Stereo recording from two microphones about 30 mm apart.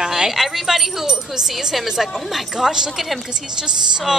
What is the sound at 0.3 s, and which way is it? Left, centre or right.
Speech, centre.